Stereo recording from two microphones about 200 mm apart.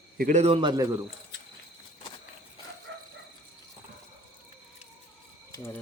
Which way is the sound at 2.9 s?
65° right (ahead or behind).